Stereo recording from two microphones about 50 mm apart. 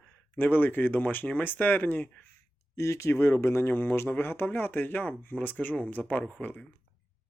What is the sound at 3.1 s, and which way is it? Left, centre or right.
Speech, left.